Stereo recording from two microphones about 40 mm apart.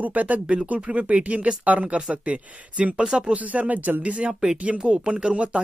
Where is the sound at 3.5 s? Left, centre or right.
Right.